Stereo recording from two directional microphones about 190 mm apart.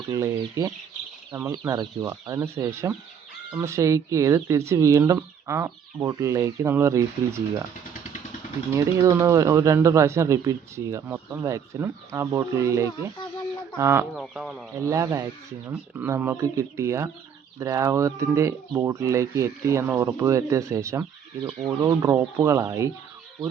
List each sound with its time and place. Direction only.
0.1 s speech: 15° right (ahead or behind)
8.7 s speech: 15° right (ahead or behind)
14.2 s speech: centre (ahead or behind)
14.8 s speech: 15° right (ahead or behind)